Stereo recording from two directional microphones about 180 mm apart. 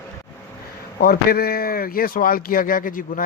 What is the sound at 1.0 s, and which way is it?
Speech, 55° left (ahead or behind).